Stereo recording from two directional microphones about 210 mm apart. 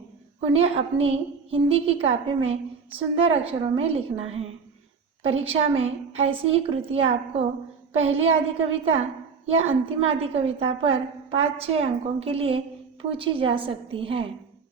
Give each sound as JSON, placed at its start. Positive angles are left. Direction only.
{"t": 0.3, "sound": "a woman's voice", "side_deg": -30}